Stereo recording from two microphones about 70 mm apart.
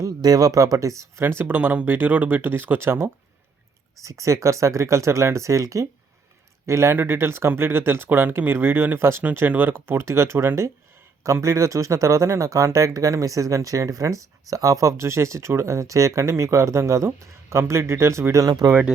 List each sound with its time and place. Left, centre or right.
0.2 s speech: right
1.2 s speech: right
4.0 s speech: right
18.4 s speech: right